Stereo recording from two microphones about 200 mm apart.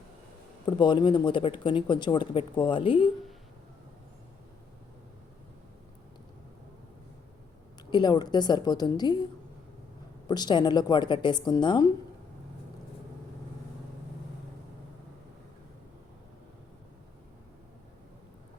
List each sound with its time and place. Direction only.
0.6 s speech: 25° left (ahead or behind)
7.9 s speech: 20° left (ahead or behind)
10.2 s speech: 20° left (ahead or behind)